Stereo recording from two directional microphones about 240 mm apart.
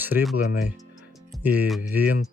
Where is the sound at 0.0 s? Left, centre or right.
Centre.